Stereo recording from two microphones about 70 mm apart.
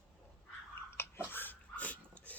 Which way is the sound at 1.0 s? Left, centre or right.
Left.